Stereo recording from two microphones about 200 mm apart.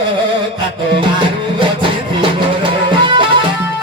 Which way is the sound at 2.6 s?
25° right (ahead or behind).